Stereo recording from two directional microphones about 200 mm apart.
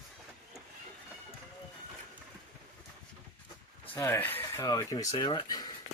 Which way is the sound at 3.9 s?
10° left (ahead or behind).